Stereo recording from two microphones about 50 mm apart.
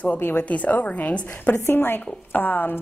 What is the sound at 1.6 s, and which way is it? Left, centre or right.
A woman's voice, left.